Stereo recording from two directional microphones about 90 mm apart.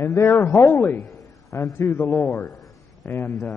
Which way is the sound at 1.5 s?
30° left (ahead or behind).